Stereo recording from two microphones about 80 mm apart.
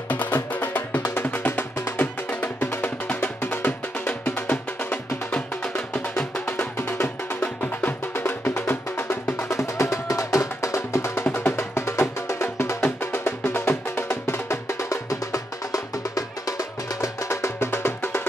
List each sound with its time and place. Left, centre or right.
0.1 s music: left
6.4 s music: left